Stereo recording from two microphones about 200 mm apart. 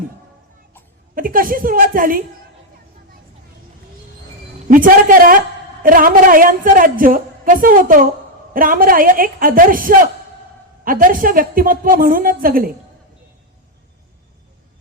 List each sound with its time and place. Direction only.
1.1 s a woman's voice: 45° right (ahead or behind)
4.7 s a woman's voice: 45° right (ahead or behind)